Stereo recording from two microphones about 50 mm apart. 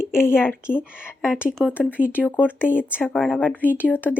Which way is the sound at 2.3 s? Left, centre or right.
Left.